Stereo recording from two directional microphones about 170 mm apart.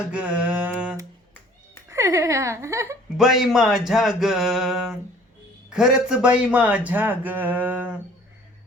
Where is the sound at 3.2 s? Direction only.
Centre (ahead or behind).